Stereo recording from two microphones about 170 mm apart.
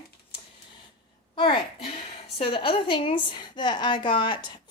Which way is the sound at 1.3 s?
30° left (ahead or behind).